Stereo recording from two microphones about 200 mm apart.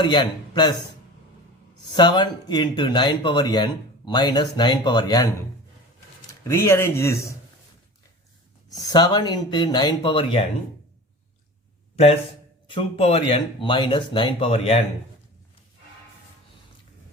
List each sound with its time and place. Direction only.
0.0 s speech: 20° left (ahead or behind)
2.0 s speech: 20° left (ahead or behind)
6.5 s speech: 15° left (ahead or behind)
8.7 s speech: 20° left (ahead or behind)
12.6 s speech: 25° left (ahead or behind)